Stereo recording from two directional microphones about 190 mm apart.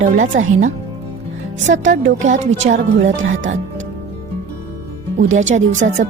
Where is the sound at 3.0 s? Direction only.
85° right.